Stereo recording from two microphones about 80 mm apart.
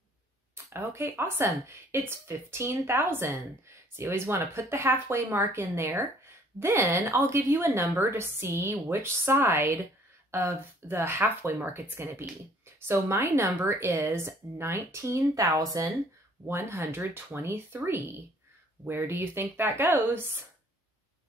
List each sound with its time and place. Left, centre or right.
0.7 s speech: right
16.4 s speech: right